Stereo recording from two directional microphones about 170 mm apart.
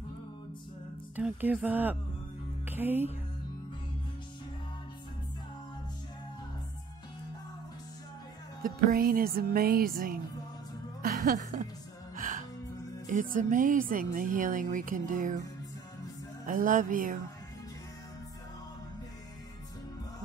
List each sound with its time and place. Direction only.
1.1 s speech: 10° right (ahead or behind)
2.6 s music: 10° right (ahead or behind)
8.6 s music: 60° right (ahead or behind)
13.0 s speech: 50° right (ahead or behind)
16.4 s speech: 50° right (ahead or behind)